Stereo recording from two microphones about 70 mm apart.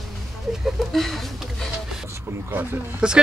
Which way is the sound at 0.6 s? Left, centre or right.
Centre.